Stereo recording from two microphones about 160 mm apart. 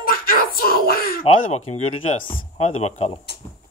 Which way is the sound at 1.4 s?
45° left (ahead or behind).